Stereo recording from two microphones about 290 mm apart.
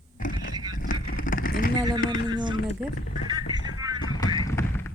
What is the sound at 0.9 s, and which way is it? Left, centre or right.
Vehicle, left.